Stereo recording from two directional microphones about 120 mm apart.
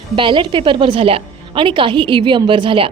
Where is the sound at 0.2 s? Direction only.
45° right (ahead or behind).